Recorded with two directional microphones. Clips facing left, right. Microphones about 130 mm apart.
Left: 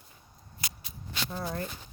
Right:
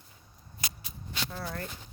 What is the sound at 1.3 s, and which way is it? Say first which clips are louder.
Speech: left 5 dB; 25° left (ahead or behind).